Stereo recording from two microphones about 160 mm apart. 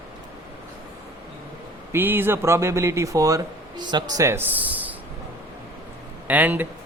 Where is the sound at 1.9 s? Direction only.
15° right (ahead or behind).